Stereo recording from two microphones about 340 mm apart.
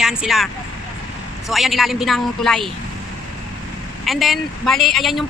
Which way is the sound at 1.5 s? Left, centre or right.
Centre.